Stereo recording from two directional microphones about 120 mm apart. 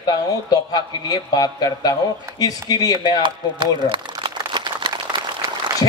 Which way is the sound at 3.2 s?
40° right (ahead or behind).